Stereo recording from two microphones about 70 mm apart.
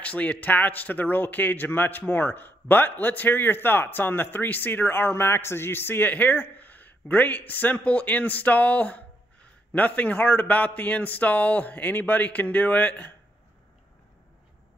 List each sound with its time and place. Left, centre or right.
0.0 s a man's voice: left